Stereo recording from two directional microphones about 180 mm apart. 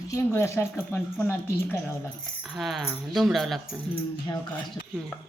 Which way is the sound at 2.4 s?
Centre (ahead or behind).